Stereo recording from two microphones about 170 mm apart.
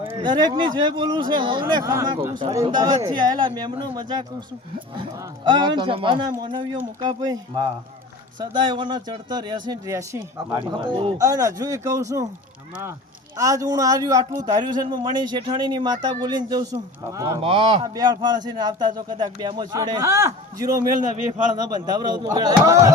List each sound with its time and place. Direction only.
0.2 s a man's voice: 25° right (ahead or behind)
5.5 s a man's voice: 25° right (ahead or behind)
13.3 s a man's voice: 20° right (ahead or behind)
17.4 s a man's voice: 30° right (ahead or behind); by 20.7 s 15° right (ahead or behind)
21.8 s a man's voice: 25° right (ahead or behind)